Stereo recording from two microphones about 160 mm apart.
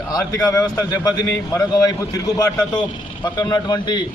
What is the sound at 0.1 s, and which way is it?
Speech, 25° left (ahead or behind).